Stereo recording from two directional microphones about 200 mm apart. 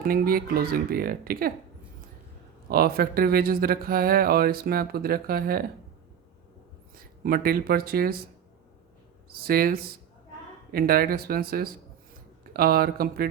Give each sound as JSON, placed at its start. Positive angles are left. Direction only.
{"t": 0.0, "sound": "speech", "side_deg": -45}
{"t": 2.6, "sound": "speech", "side_deg": -50}
{"t": 6.9, "sound": "speech", "side_deg": -50}
{"t": 9.3, "sound": "speech", "side_deg": -50}